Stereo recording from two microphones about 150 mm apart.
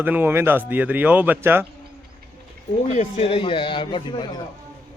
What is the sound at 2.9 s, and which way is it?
A man's voice, 45° left (ahead or behind).